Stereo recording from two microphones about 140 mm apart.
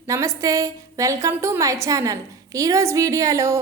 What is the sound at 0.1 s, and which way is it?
A woman's voice, 25° right (ahead or behind).